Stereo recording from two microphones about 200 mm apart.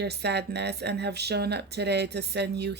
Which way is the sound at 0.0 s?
55° right (ahead or behind).